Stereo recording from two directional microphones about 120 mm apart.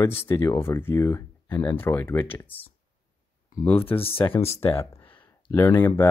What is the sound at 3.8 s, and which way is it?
Speech, 50° left (ahead or behind).